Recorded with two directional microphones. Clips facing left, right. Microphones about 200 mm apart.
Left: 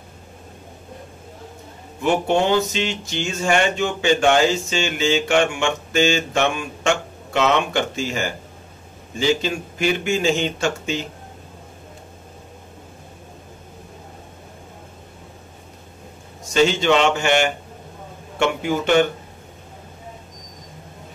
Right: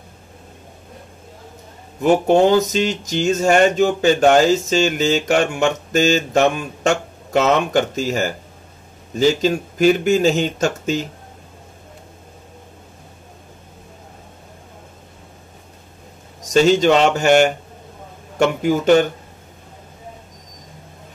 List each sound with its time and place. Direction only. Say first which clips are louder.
2.0 s speech: right 5 dB; 40° right (ahead or behind)
16.4 s speech: right 4 dB; 40° right (ahead or behind)